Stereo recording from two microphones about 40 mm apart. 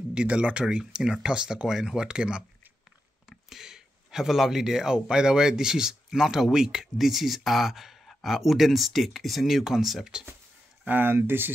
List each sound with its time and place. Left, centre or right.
0.1 s speech: right
1.7 s speech: centre
2.0 s speech: right
3.3 s speech: centre
10.9 s speech: right